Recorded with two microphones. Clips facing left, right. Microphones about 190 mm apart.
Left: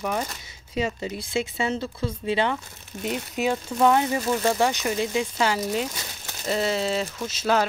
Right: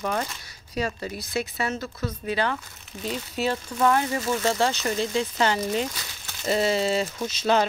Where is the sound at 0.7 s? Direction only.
20° left (ahead or behind).